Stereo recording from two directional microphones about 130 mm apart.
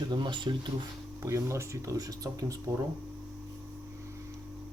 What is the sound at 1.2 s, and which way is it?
Speech, 25° right (ahead or behind).